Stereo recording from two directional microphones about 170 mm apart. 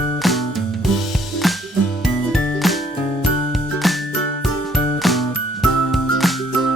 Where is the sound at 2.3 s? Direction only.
Centre (ahead or behind).